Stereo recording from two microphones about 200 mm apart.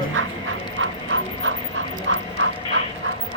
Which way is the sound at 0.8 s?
70° right (ahead or behind).